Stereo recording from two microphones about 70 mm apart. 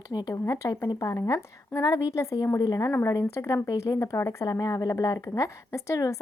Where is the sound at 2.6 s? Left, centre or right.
Left.